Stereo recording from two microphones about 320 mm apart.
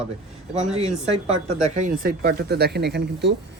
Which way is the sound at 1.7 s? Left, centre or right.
Right.